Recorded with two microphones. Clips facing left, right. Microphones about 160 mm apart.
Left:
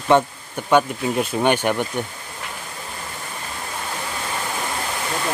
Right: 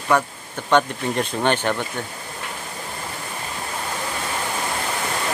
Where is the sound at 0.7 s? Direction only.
5° left (ahead or behind).